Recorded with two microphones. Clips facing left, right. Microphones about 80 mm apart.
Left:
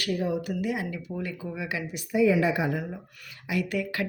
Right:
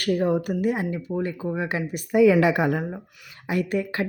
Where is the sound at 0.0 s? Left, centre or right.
Right.